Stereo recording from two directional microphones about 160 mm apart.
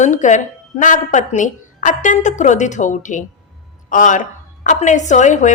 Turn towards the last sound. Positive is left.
turn(degrees=50)  # may be behind; listen again after turning